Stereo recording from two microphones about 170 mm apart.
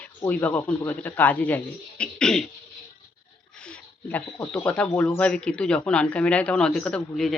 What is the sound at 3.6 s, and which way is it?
Speech, 10° left (ahead or behind).